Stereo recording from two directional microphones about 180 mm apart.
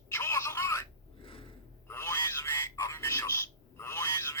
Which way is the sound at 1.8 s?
15° left (ahead or behind).